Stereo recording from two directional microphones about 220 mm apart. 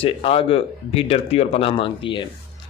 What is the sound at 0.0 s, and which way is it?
A man's voice, 25° left (ahead or behind).